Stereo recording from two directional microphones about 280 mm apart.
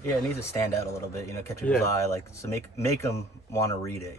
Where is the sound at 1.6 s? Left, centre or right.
Centre.